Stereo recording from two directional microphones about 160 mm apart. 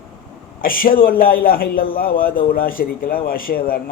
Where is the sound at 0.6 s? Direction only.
65° left (ahead or behind).